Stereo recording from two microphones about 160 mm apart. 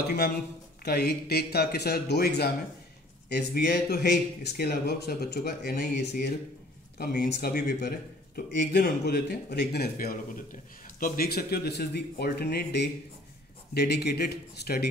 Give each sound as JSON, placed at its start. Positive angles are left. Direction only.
{"t": 0.8, "sound": "speech", "side_deg": 80}
{"t": 8.4, "sound": "speech", "side_deg": 75}